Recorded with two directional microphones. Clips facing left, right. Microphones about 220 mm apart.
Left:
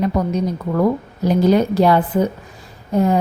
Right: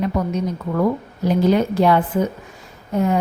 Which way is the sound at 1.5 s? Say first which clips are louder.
Left 2 dB; 40° left (ahead or behind).